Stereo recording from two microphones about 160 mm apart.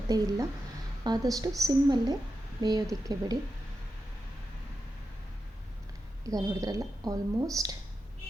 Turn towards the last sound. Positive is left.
turn(degrees=-20)  # may be behind; listen again after turning